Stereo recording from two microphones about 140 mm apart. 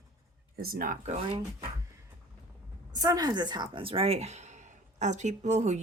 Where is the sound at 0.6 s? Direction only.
85° right.